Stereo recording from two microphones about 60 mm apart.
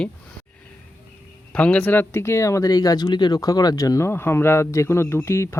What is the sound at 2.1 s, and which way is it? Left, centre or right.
Speech, left.